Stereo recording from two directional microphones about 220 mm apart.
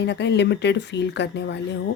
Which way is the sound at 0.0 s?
50° left (ahead or behind).